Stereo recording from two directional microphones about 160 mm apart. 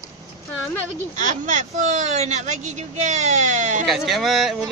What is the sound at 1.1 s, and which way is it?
Speech, 50° right (ahead or behind).